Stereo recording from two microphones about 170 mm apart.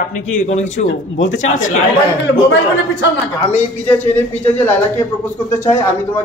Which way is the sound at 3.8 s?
10° left (ahead or behind).